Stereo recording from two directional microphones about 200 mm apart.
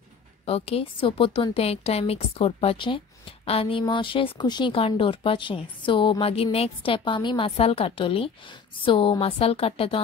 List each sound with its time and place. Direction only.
0.5 s a woman's voice: 30° left (ahead or behind)